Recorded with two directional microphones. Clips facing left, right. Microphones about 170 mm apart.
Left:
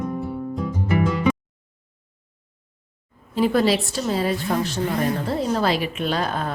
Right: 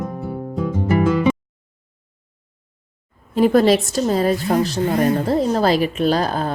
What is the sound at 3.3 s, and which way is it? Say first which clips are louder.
Speech: right 5 dB; 45° right (ahead or behind).